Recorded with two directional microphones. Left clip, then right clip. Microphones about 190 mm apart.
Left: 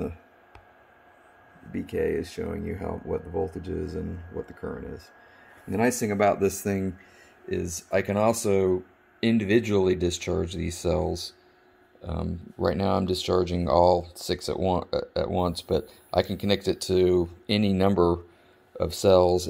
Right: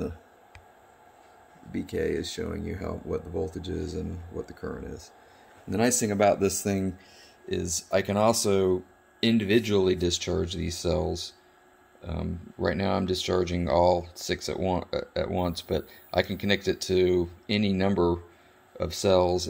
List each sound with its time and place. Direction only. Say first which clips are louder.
1.7 s speech: left 2 dB; 5° left (ahead or behind)
3.4 s speech: left 1 dB; 40° left (ahead or behind)
4.5 s speech: left 1 dB; 5° left (ahead or behind)